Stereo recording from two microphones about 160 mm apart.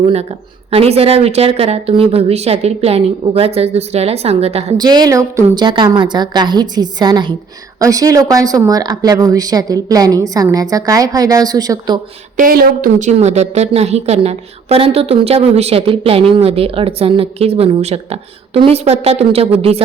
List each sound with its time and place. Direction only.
0.0 s a woman's voice: 40° right (ahead or behind)
4.8 s a woman's voice: 25° right (ahead or behind)
12.4 s speech: 65° right (ahead or behind)
13.1 s a woman's voice: 45° right (ahead or behind)